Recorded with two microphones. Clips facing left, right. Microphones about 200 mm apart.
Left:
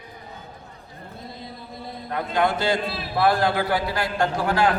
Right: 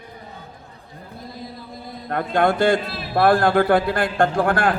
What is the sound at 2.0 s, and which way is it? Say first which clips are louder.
Speech: right 4 dB; 55° right (ahead or behind).